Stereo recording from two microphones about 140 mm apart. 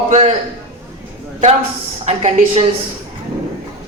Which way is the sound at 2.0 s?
50° right (ahead or behind).